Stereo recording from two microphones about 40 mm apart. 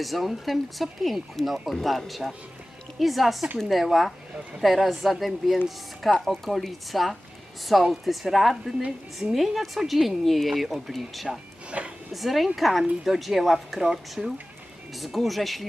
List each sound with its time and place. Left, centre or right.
0.0 s speech: centre
11.7 s a sound: right
12.1 s speech: centre
13.8 s speech: centre
14.9 s speech: centre